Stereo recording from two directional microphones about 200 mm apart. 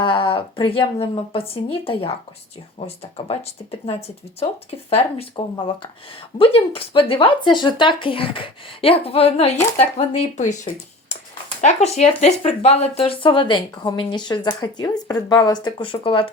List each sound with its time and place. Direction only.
0.0 s speech: 25° left (ahead or behind)